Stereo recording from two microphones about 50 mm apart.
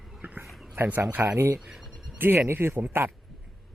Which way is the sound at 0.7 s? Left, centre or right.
Right.